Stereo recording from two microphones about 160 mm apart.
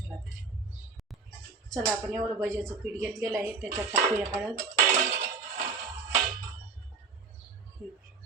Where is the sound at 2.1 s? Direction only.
15° right (ahead or behind).